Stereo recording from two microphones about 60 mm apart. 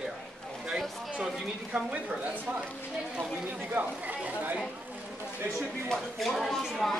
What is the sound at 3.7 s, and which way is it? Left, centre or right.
Speech, right.